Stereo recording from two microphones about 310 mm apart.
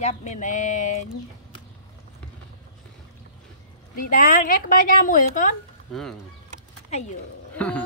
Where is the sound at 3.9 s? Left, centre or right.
Left.